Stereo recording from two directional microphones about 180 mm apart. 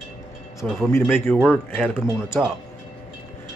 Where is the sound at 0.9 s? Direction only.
10° left (ahead or behind).